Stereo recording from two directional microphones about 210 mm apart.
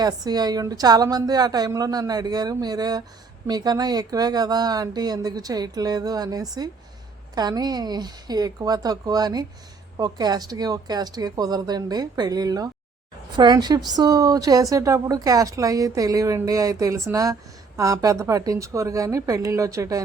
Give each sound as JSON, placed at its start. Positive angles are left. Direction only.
{"t": 0.0, "sound": "a woman's voice", "side_deg": -20}